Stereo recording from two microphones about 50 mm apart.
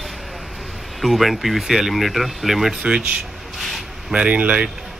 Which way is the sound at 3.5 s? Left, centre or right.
Centre.